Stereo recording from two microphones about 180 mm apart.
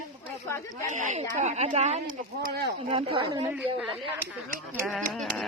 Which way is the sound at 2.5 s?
65° right (ahead or behind).